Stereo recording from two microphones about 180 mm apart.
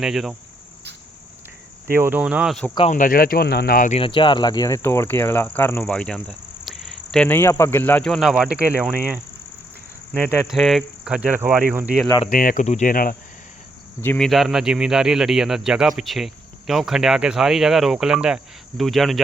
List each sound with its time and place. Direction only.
0.0 s speech: 5° right (ahead or behind)
1.9 s cricket: 10° right (ahead or behind)
2.9 s speech: 50° left (ahead or behind)
4.0 s speech: 25° left (ahead or behind); by 5.8 s 10° left (ahead or behind)
5.8 s cricket: 5° left (ahead or behind)
10.1 s speech: centre (ahead or behind)
11.7 s cricket: 10° right (ahead or behind)
12.3 s speech: 50° left (ahead or behind)
14.0 s speech: 10° left (ahead or behind)
14.3 s speech: centre (ahead or behind)